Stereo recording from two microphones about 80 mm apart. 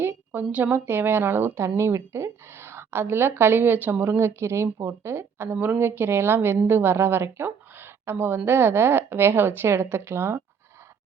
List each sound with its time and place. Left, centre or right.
0.0 s a woman's voice: right
4.2 s a woman's voice: right